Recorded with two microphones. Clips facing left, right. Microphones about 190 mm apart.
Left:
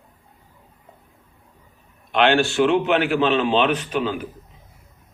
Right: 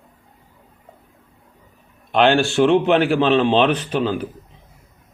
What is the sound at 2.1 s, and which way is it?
A man's voice, 35° right (ahead or behind).